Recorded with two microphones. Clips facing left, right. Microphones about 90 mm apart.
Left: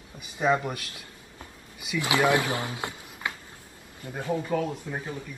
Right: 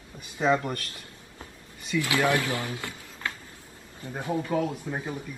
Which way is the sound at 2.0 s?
20° left (ahead or behind).